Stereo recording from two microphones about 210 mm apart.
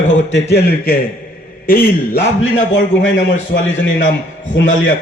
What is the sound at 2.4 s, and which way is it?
A man's voice, 65° left (ahead or behind).